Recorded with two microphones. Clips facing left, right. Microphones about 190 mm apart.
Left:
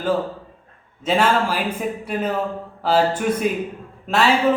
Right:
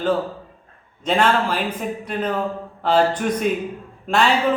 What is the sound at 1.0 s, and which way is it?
Speech, 5° left (ahead or behind).